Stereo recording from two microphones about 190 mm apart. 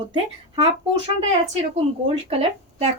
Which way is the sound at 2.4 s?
30° right (ahead or behind).